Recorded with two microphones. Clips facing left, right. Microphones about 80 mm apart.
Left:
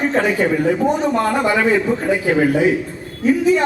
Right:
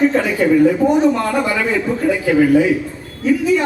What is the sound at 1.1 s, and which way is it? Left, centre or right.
A man's voice, left.